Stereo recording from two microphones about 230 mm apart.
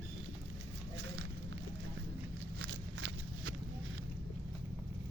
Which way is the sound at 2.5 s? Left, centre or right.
Right.